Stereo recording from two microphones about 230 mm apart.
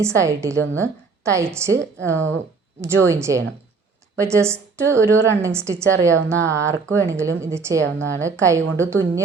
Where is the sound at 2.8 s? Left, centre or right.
Centre.